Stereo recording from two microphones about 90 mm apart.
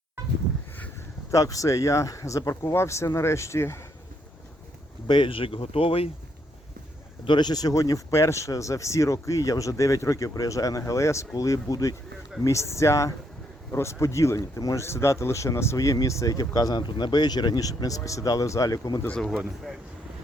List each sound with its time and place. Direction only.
1.3 s speech: 40° left (ahead or behind)
5.0 s speech: 65° left (ahead or behind); by 6.1 s 90° left
7.3 s speech: 55° left (ahead or behind)
19.0 s speech: 5° left (ahead or behind)
19.4 s speech: 5° right (ahead or behind)